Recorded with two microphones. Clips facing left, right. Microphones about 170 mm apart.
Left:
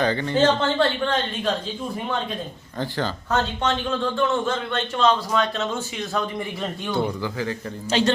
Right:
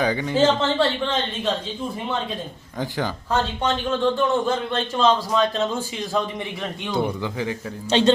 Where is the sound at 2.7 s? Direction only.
15° right (ahead or behind).